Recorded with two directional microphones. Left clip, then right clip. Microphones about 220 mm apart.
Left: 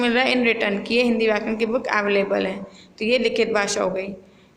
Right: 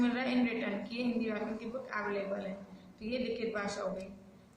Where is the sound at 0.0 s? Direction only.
40° left (ahead or behind).